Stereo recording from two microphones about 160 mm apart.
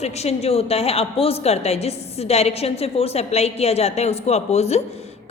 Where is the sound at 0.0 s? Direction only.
40° left (ahead or behind).